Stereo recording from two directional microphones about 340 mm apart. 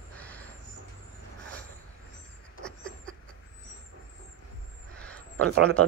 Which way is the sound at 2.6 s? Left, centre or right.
Centre.